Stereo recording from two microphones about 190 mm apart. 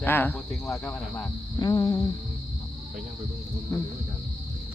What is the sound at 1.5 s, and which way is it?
Speech, 20° left (ahead or behind).